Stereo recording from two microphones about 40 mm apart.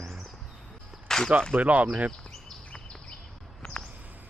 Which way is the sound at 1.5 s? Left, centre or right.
Right.